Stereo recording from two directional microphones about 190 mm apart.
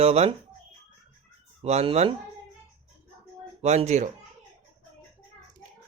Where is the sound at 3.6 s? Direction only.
35° right (ahead or behind).